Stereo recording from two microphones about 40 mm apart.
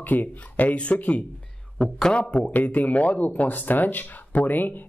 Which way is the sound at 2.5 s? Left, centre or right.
Left.